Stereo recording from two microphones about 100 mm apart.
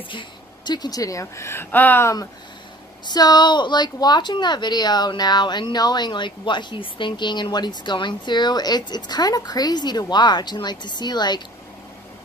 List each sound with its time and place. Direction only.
0.1 s a woman's voice: 50° left (ahead or behind); by 2.1 s 20° left (ahead or behind)
3.1 s a woman's voice: 45° left (ahead or behind)